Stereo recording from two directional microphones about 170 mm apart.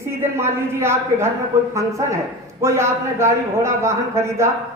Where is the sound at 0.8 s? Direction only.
15° right (ahead or behind).